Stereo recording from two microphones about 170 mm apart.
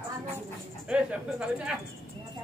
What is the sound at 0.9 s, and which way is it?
Speech, 5° right (ahead or behind).